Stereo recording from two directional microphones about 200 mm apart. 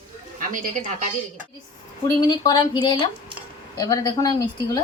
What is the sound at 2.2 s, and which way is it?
A woman's voice, 20° left (ahead or behind).